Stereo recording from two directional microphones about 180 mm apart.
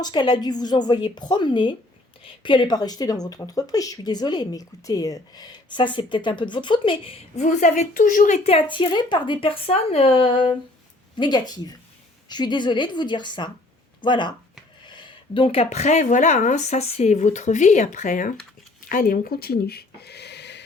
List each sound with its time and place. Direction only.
0.0 s speech: 25° left (ahead or behind)
7.4 s a woman's voice: 40° left (ahead or behind)
8.4 s speech: 30° left (ahead or behind); by 20.7 s 70° left (ahead or behind)